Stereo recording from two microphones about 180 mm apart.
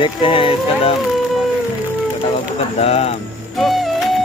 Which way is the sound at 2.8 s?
35° left (ahead or behind).